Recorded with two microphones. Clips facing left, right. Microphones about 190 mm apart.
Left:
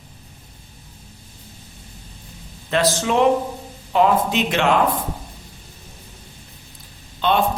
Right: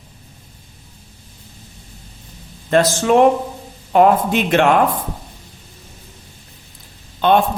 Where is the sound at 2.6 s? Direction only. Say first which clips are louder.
Right 5 dB; 50° right (ahead or behind).